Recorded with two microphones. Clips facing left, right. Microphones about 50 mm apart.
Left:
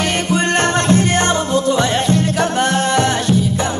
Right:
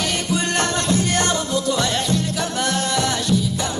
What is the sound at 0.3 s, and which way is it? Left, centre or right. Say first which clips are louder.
Music: left 6 dB; left.